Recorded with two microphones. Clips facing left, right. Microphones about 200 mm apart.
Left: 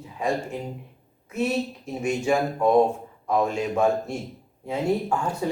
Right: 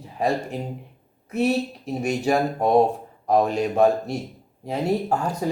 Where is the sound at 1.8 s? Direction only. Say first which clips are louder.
Right 1 dB; 35° right (ahead or behind).